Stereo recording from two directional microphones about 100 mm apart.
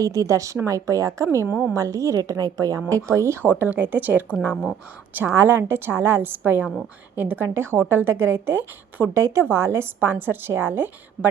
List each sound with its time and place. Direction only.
0.0 s a woman's voice: 35° right (ahead or behind); by 4.4 s 20° right (ahead or behind)
4.5 s speech: 10° left (ahead or behind)
5.1 s a woman's voice: 20° right (ahead or behind)